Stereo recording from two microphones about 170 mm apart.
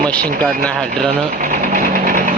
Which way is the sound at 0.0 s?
5° left (ahead or behind).